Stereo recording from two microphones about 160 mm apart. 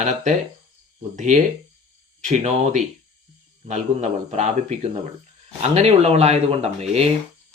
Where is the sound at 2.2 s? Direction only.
50° right (ahead or behind).